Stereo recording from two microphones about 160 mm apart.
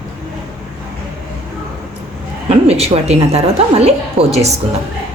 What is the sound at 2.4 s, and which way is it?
A woman's voice, 40° right (ahead or behind).